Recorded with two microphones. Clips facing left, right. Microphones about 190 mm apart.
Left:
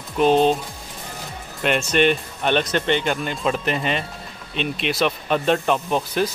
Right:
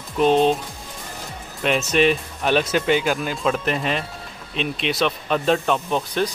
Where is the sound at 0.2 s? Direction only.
Centre (ahead or behind).